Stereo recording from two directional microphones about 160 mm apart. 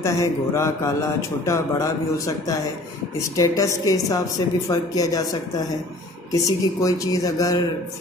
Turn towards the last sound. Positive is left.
turn(degrees=20)  # may be behind; listen again after turning